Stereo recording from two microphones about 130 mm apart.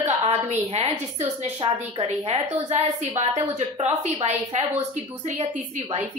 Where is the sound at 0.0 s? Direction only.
55° right (ahead or behind).